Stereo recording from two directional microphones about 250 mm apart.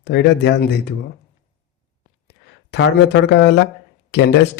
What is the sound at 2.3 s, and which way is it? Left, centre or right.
Speech, left.